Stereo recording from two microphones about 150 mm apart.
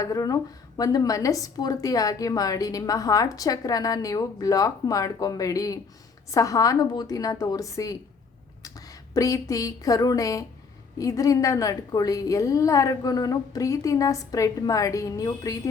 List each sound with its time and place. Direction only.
0.0 s a woman's voice: 25° left (ahead or behind)